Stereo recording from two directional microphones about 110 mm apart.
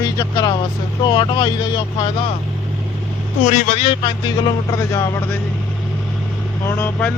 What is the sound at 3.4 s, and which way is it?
Speech, 60° left (ahead or behind).